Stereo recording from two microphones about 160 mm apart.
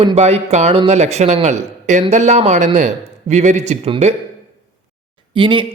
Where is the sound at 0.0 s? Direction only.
40° right (ahead or behind).